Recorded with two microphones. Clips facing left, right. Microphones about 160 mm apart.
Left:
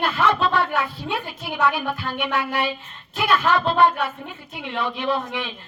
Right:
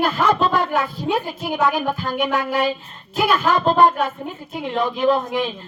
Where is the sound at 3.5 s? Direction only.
40° right (ahead or behind).